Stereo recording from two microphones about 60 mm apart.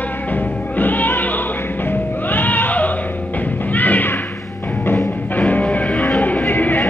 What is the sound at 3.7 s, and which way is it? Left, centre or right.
Music, left.